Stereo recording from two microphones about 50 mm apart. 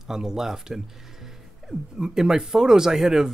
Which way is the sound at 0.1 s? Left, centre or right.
Centre.